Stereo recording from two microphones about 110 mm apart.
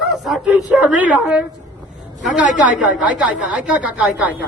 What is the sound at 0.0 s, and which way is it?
A woman's voice, centre (ahead or behind).